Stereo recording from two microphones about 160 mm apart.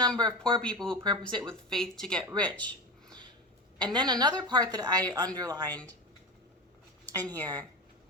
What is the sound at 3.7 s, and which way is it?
Speech, 30° right (ahead or behind).